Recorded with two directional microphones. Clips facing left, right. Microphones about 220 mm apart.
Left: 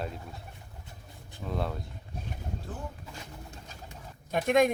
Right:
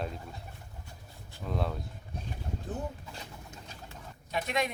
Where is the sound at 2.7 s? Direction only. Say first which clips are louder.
Right 6 dB; 20° right (ahead or behind).